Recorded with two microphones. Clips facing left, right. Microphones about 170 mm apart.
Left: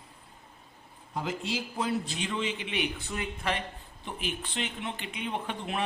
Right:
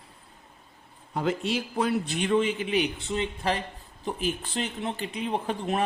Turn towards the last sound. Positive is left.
turn(degrees=-40)  # may be behind; listen again after turning